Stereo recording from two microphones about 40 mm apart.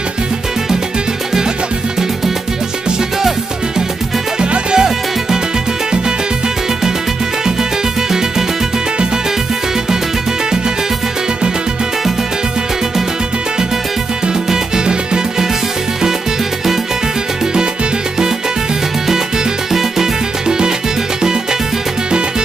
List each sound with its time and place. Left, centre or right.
4.4 s music: centre
14.2 s music: centre
19.7 s music: centre
20.4 s music: centre